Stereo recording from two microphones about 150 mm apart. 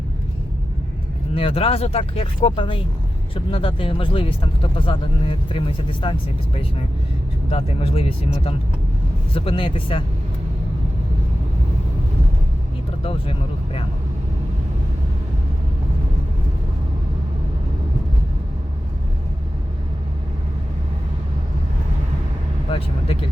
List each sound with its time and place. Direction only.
1.3 s speech: 40° left (ahead or behind)
7.5 s speech: 40° left (ahead or behind)
13.0 s speech: 35° left (ahead or behind)